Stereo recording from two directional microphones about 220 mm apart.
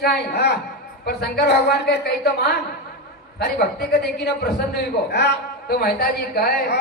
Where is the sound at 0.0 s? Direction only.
50° left (ahead or behind).